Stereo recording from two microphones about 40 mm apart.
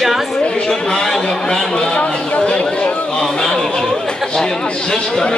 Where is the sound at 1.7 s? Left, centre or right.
Left.